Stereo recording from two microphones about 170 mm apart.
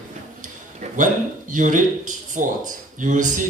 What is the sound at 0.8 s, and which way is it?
A man's voice, 50° right (ahead or behind).